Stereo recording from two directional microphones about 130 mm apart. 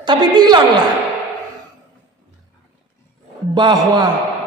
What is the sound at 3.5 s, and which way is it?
Speech, 35° right (ahead or behind).